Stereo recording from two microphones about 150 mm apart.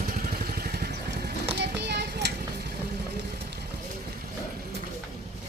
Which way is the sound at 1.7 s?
90° right.